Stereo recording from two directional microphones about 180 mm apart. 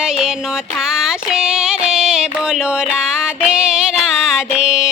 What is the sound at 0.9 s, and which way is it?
Music, 5° right (ahead or behind).